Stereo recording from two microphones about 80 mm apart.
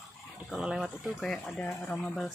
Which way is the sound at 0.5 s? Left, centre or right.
Centre.